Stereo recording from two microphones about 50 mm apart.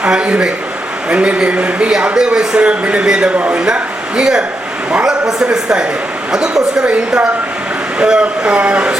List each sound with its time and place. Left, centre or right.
0.0 s a man's voice: centre
4.2 s a man's voice: centre